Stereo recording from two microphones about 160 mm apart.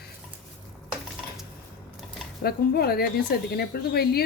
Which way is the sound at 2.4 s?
75° left (ahead or behind).